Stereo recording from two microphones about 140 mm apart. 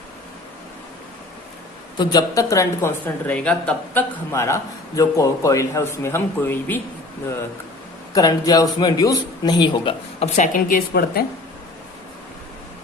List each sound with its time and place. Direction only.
2.0 s a man's voice: 30° left (ahead or behind)
3.2 s speech: 5° left (ahead or behind)
4.3 s a man's voice: 20° left (ahead or behind)
8.1 s a man's voice: 25° left (ahead or behind)
10.2 s a woman's voice: 60° left (ahead or behind); by 11.3 s 90° left